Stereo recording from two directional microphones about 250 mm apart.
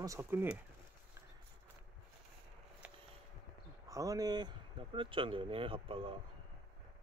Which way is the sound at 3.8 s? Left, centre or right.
Centre.